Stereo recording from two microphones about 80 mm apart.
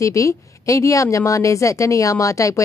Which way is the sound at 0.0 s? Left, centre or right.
Left.